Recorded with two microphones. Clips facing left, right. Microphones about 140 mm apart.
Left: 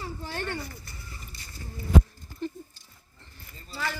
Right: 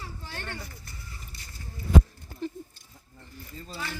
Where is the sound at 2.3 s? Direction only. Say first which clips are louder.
Even; 55° right (ahead or behind).